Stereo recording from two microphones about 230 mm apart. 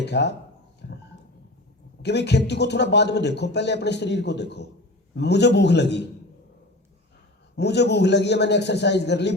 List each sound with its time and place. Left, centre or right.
0.0 s a man's voice: left
0.8 s a sound: left
2.0 s a man's voice: left
7.5 s a man's voice: left